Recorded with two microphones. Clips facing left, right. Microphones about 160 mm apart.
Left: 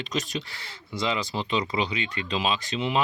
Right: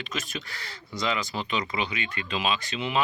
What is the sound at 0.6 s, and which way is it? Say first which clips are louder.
Speech: left 2 dB; 25° left (ahead or behind).